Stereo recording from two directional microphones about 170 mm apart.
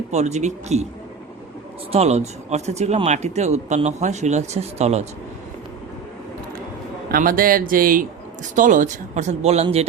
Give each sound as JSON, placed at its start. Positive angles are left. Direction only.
{"t": 0.1, "sound": "speech", "side_deg": -40}
{"t": 1.9, "sound": "speech", "side_deg": -40}
{"t": 7.1, "sound": "speech", "side_deg": -55}